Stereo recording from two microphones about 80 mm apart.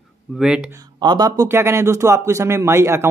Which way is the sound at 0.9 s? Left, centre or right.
Right.